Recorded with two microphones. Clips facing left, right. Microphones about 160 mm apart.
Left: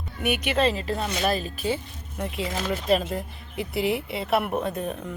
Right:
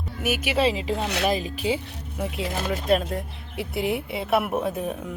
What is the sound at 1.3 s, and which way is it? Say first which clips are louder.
Speech: right 2 dB; 15° right (ahead or behind).